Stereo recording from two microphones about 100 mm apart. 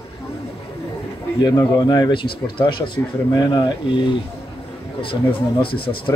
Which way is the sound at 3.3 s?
45° left (ahead or behind).